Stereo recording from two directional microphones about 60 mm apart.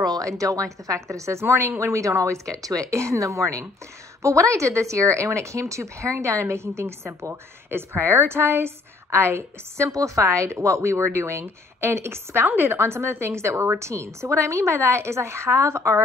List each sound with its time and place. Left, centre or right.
0.0 s a woman's voice: right
2.0 s a woman's voice: right
2.5 s a woman's voice: right
9.8 s speech: right